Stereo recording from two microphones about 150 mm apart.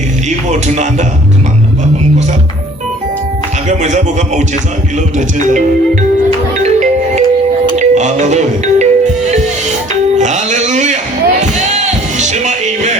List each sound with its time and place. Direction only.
0.3 s music: 50° right (ahead or behind)
3.7 s music: 55° right (ahead or behind)